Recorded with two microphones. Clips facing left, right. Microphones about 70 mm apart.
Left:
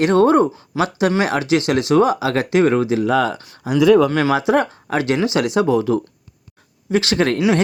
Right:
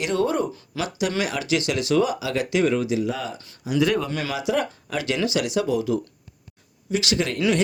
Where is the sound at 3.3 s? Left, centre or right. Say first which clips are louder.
Left 5 dB; left.